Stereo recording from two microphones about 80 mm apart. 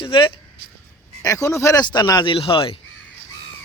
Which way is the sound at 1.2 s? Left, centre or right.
Left.